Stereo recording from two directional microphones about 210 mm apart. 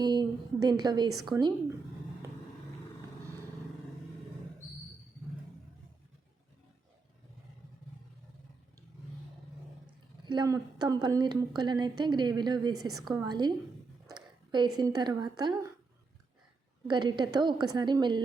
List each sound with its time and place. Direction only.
0.0 s a woman's voice: 20° right (ahead or behind)
10.2 s a woman's voice: 20° right (ahead or behind)
16.8 s a woman's voice: 20° right (ahead or behind)